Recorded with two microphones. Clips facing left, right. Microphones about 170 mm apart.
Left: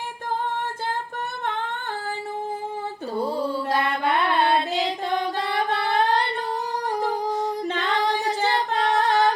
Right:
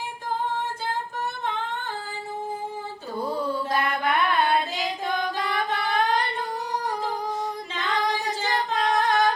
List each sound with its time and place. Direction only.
3.2 s mantra: 30° left (ahead or behind)
5.4 s singing: 30° left (ahead or behind)
8.4 s music: 30° left (ahead or behind)